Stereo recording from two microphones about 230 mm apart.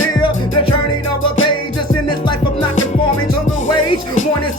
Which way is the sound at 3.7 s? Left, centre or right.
Left.